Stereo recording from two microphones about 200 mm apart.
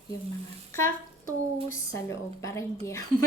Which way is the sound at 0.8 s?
90° left.